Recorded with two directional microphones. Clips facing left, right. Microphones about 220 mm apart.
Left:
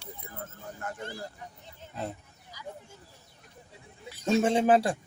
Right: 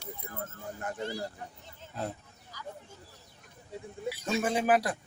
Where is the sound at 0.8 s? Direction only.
20° right (ahead or behind).